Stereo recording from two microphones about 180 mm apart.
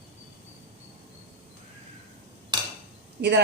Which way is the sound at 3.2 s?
75° right (ahead or behind).